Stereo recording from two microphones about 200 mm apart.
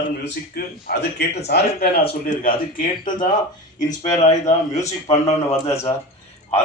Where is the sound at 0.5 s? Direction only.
55° left (ahead or behind).